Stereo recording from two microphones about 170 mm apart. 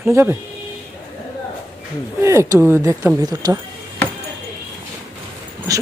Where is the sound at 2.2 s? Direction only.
15° right (ahead or behind).